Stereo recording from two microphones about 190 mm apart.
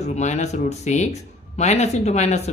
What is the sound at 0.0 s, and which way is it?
Speech, 35° left (ahead or behind).